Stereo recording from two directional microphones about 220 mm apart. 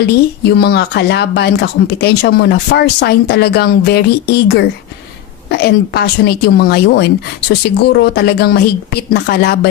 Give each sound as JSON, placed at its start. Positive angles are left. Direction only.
{"t": 0.5, "sound": "speech", "side_deg": 50}